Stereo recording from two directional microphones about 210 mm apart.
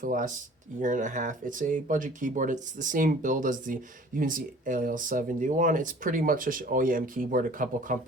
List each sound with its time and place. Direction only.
0.0 s speech: 40° right (ahead or behind)